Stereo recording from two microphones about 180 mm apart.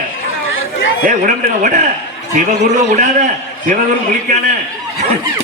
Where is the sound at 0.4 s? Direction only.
90° left.